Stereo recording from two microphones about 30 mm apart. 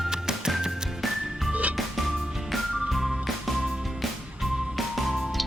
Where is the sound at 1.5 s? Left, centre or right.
Right.